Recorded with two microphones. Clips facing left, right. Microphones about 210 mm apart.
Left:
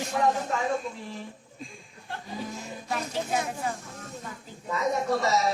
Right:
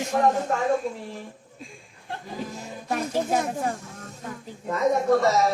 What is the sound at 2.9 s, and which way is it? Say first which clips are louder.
Speech: right 5 dB; 45° right (ahead or behind).